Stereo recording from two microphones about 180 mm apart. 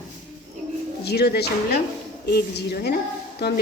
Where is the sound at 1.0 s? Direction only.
65° left (ahead or behind).